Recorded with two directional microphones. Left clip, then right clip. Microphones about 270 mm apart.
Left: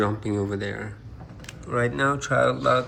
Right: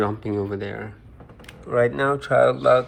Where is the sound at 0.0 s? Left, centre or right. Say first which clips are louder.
Right 1 dB; centre.